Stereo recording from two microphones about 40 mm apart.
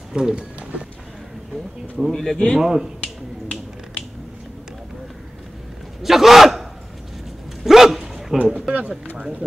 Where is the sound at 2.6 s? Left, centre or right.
Centre.